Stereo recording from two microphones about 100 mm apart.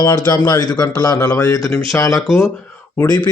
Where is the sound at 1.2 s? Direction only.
25° left (ahead or behind).